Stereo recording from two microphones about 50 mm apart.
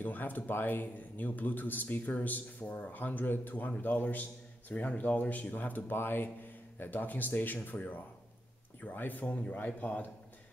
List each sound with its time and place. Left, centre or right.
0.0 s speech: left